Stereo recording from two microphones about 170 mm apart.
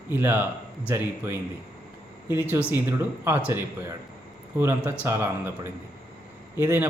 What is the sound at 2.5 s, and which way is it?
A man's voice, 15° right (ahead or behind).